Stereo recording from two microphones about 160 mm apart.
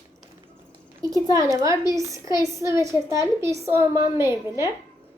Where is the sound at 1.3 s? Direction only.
20° right (ahead or behind).